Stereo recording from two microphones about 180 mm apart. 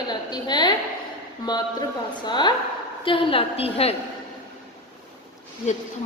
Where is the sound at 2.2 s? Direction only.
25° left (ahead or behind).